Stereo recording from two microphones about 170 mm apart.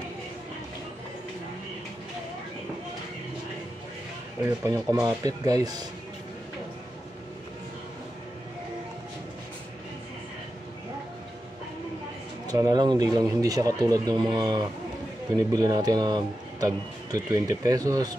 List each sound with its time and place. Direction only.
4.4 s a man's voice: 15° right (ahead or behind)
12.4 s a man's voice: 20° right (ahead or behind)